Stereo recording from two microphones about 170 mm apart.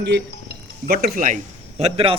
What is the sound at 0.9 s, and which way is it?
A man's voice, 55° right (ahead or behind).